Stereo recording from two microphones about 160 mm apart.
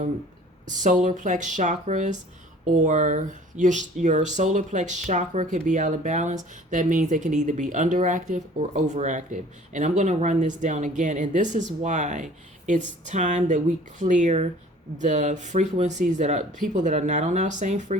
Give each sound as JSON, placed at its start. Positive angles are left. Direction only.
{"t": 0.7, "sound": "speech", "side_deg": -50}